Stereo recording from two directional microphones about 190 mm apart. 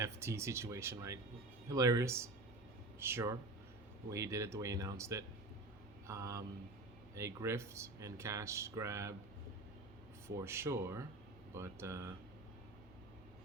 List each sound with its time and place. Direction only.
0.0 s speech: 15° right (ahead or behind)
10.2 s speech: 15° right (ahead or behind)